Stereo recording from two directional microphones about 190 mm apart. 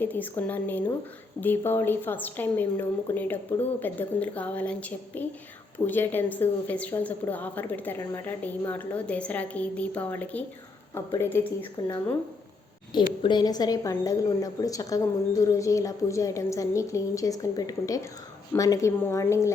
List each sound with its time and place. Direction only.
0.0 s a woman's voice: 10° left (ahead or behind)
13.2 s a woman's voice: 20° left (ahead or behind)